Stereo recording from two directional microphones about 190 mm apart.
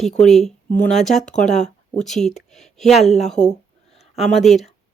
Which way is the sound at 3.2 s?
5° left (ahead or behind).